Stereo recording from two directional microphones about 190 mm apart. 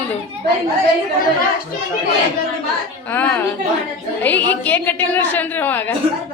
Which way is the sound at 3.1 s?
10° left (ahead or behind).